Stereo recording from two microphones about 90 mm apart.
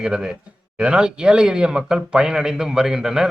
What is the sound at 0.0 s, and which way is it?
A man's voice, 10° right (ahead or behind).